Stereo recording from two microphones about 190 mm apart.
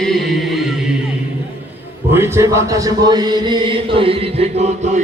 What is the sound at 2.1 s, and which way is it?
Speech, 15° right (ahead or behind).